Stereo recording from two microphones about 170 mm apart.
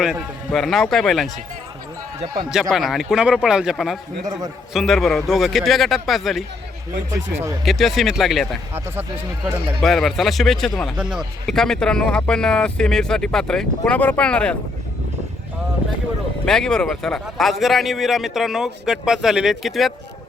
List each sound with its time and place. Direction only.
0.0 s a man's voice: centre (ahead or behind)
2.5 s a man's voice: centre (ahead or behind)
4.3 s a man's voice: 25° right (ahead or behind)
4.7 s a man's voice: centre (ahead or behind)
7.1 s speech: 15° right (ahead or behind)
7.6 s a man's voice: centre (ahead or behind)
16.5 s a man's voice: 5° left (ahead or behind)